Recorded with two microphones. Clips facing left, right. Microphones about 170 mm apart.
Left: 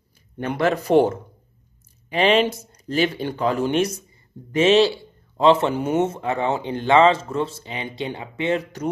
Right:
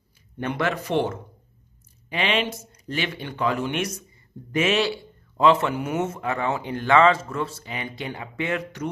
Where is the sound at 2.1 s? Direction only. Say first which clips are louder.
Left 7 dB; 40° left (ahead or behind).